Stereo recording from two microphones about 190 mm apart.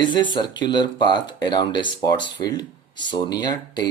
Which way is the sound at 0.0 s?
25° left (ahead or behind).